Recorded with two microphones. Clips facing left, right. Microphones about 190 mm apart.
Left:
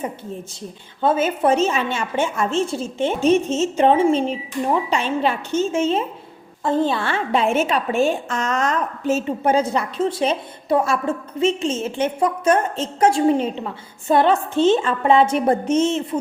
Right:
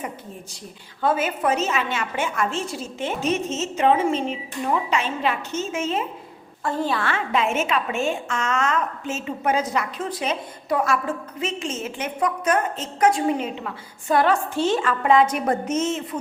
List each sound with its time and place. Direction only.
1.0 s a woman's voice: 25° left (ahead or behind)